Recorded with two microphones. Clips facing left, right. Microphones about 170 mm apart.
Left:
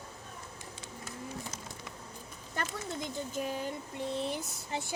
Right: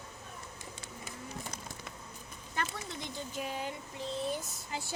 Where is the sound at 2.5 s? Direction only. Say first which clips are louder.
Left 1 dB; 45° left (ahead or behind).